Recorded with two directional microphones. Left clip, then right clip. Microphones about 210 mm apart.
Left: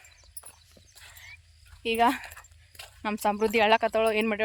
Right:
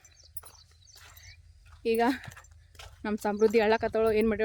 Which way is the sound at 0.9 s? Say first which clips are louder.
Left 3 dB; 5° left (ahead or behind).